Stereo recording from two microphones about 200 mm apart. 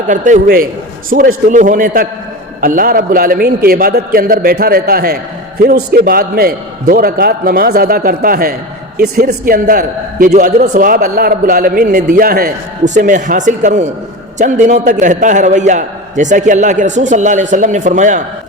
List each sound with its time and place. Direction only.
0.1 s a man's voice: 40° right (ahead or behind)